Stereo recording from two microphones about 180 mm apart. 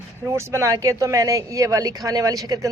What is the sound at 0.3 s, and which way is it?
Speech, 15° right (ahead or behind).